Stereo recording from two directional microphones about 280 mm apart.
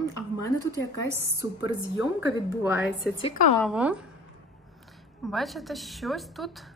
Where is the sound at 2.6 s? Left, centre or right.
Centre.